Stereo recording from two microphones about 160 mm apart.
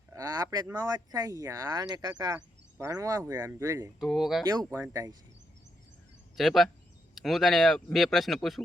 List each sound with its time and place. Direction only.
0.1 s a sound: 20° right (ahead or behind)
0.9 s speech: 25° right (ahead or behind)
4.0 s speech: centre (ahead or behind)
4.7 s speech: 20° right (ahead or behind)
6.3 s speech: centre (ahead or behind)